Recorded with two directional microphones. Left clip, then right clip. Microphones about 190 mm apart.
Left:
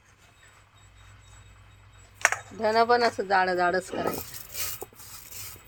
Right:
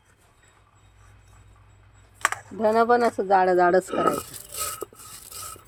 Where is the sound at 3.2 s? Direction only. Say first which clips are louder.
Right 5 dB; 50° right (ahead or behind).